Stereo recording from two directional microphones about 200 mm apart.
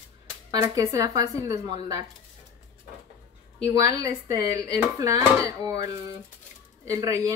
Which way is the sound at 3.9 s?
15° right (ahead or behind).